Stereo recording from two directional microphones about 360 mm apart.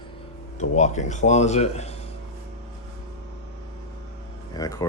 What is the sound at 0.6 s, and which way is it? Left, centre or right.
Speech, centre.